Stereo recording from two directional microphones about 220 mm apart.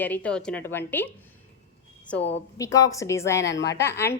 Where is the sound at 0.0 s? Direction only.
5° left (ahead or behind).